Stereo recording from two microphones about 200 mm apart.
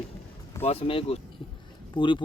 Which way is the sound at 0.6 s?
30° left (ahead or behind).